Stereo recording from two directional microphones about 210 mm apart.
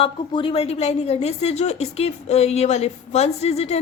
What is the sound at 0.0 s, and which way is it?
Speech, 25° left (ahead or behind).